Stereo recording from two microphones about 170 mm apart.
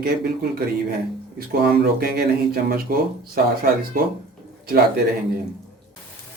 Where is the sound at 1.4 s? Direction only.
65° right (ahead or behind).